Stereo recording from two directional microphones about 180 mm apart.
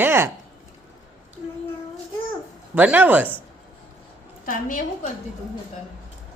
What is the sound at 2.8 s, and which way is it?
Speech, 10° right (ahead or behind).